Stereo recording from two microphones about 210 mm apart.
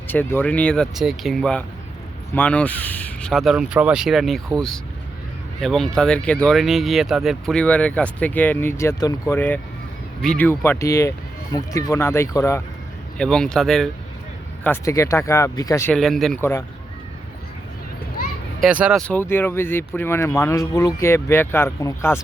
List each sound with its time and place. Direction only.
0.1 s speech: 10° left (ahead or behind)
16.0 s speech: centre (ahead or behind)
18.2 s children playing: 45° left (ahead or behind)
18.6 s speech: 5° right (ahead or behind); by 22.2 s 15° left (ahead or behind)